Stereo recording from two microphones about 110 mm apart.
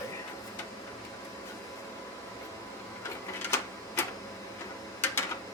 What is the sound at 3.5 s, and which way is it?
Printer, 25° left (ahead or behind).